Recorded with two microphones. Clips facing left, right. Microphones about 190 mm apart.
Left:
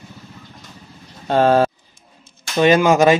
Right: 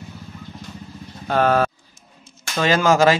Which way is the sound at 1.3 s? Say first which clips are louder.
Left 4 dB; 30° left (ahead or behind).